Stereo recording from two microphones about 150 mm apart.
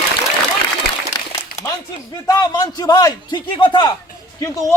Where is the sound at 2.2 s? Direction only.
25° left (ahead or behind).